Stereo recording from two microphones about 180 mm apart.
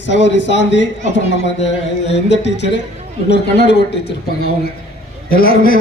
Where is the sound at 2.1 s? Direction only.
75° left (ahead or behind).